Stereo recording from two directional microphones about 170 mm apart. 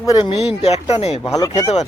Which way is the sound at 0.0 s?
20° left (ahead or behind).